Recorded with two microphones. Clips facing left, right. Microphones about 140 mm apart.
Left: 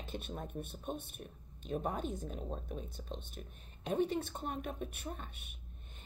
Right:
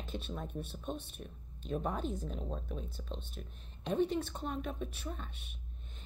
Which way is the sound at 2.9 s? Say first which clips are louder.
Right 1 dB; 50° left (ahead or behind).